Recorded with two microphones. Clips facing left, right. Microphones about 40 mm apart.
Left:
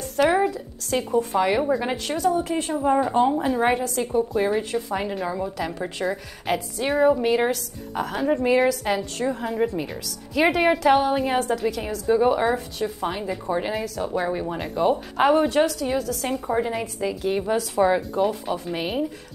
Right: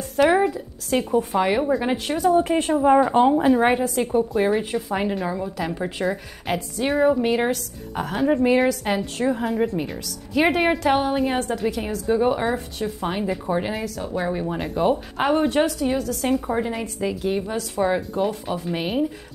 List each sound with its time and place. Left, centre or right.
0.1 s a woman's voice: centre
2.3 s a woman's voice: right
4.3 s a woman's voice: centre
15.9 s a woman's voice: centre